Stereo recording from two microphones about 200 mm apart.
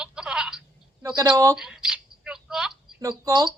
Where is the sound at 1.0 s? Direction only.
20° right (ahead or behind).